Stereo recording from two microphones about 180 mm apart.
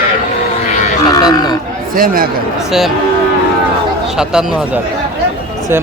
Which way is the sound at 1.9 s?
50° right (ahead or behind).